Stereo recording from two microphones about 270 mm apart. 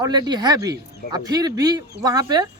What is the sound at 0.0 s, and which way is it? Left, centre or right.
Speech, centre.